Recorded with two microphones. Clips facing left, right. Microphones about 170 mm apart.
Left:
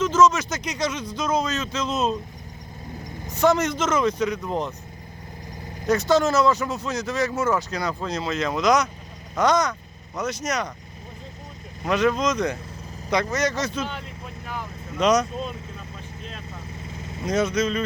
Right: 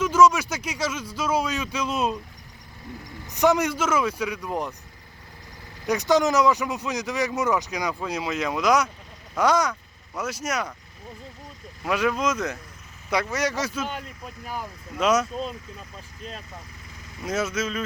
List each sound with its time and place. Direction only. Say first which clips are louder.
0.0 s speech: even; 10° right (ahead or behind)
3.3 s speech: left 1 dB; 15° right (ahead or behind)
5.9 s speech: left 1 dB; 15° right (ahead or behind)
11.9 s speech: left 3 dB; 5° right (ahead or behind)
14.9 s speech: left 2 dB; 5° right (ahead or behind)
16.9 s vehicle: left 6 dB; 25° left (ahead or behind)
17.2 s speech: left 4 dB; 5° right (ahead or behind)